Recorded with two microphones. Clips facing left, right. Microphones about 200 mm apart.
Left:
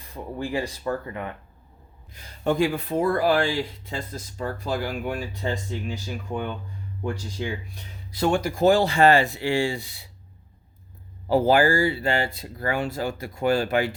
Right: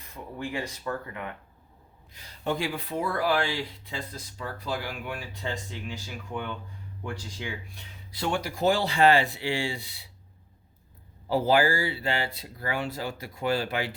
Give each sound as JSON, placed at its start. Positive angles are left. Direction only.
{"t": 0.1, "sound": "speech", "side_deg": 35}
{"t": 2.1, "sound": "speech", "side_deg": 50}
{"t": 11.3, "sound": "speech", "side_deg": 50}